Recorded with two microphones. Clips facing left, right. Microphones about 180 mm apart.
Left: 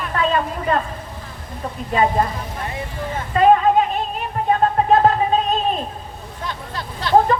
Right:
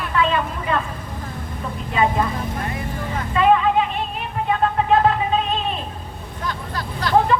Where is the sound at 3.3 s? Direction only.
40° left (ahead or behind).